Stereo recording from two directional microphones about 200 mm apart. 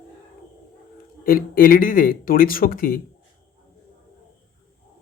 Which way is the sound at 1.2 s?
45° left (ahead or behind).